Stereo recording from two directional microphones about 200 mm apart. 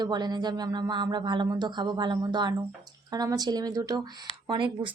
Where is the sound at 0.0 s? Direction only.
20° right (ahead or behind).